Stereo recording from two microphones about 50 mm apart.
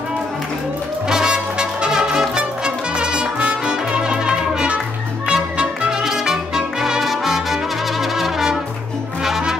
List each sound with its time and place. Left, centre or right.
1.0 s brass instrument: centre
5.3 s music: centre
8.0 s brass instrument: centre
9.2 s music: centre